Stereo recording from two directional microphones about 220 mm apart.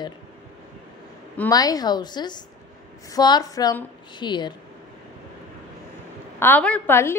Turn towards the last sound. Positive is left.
turn(degrees=10)  # may be behind; listen again after turning